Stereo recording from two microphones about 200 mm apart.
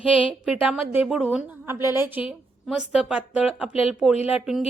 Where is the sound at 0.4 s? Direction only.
5° right (ahead or behind).